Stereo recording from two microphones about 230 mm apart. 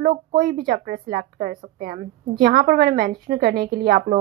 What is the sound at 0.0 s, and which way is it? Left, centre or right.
Speech, right.